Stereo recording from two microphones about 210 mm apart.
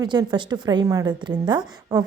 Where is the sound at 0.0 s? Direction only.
20° right (ahead or behind).